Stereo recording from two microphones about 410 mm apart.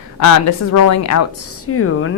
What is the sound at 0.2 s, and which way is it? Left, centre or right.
A woman's voice, left.